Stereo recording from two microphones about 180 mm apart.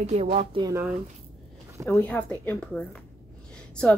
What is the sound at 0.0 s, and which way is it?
Speech, 35° right (ahead or behind).